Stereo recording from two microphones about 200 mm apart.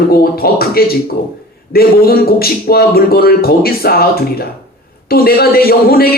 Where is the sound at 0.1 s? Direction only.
50° left (ahead or behind).